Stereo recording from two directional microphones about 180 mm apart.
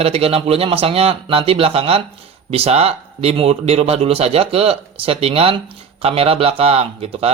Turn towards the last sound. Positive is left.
turn(degrees=-35)  # may be behind; listen again after turning